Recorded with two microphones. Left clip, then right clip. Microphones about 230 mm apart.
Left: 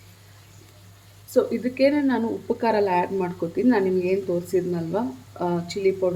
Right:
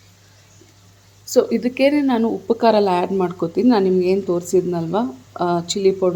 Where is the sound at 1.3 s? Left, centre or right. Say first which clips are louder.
Right 5 dB; right.